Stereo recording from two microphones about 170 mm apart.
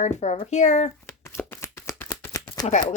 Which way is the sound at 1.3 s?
15° left (ahead or behind).